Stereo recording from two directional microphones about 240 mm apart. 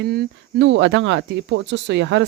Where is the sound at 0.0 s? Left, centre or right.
Right.